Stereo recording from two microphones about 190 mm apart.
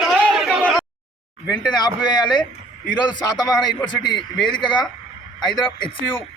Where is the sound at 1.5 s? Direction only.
20° left (ahead or behind).